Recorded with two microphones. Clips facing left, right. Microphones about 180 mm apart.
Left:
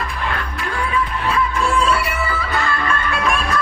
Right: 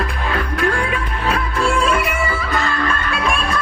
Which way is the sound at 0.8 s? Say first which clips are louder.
Even; 80° right.